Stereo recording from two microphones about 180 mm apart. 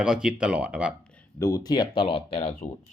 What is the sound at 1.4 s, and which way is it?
Speech, 15° left (ahead or behind).